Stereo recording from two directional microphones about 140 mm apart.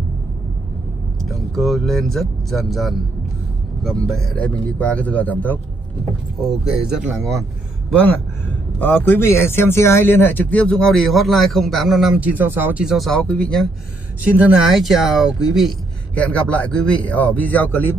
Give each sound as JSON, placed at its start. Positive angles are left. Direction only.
{"t": 1.3, "sound": "speech", "side_deg": 0}
{"t": 6.6, "sound": "speech", "side_deg": -5}
{"t": 7.9, "sound": "speech", "side_deg": 10}
{"t": 14.2, "sound": "speech", "side_deg": -10}
{"t": 16.2, "sound": "speech", "side_deg": 10}